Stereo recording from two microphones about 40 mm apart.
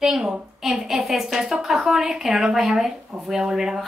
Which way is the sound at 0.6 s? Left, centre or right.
Centre.